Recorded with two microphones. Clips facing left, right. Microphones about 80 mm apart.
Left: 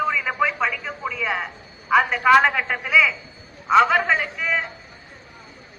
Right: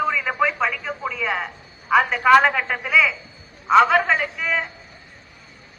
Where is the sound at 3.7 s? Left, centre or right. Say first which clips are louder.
Right 1 dB; centre.